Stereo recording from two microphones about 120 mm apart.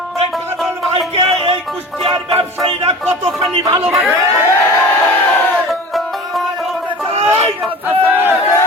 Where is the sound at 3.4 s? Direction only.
40° right (ahead or behind).